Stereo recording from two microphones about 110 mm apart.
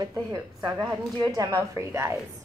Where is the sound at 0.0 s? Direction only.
35° right (ahead or behind).